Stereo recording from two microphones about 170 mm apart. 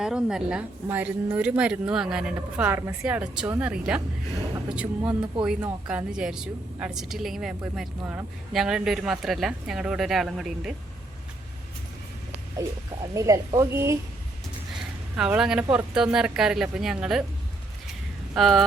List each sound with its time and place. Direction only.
0.0 s a woman's voice: 5° right (ahead or behind)
12.6 s a woman's voice: 15° right (ahead or behind)
15.1 s speech: 5° right (ahead or behind)
18.3 s speech: centre (ahead or behind)